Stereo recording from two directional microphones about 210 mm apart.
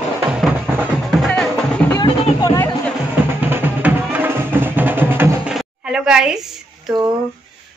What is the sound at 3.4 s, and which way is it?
Music, 10° right (ahead or behind).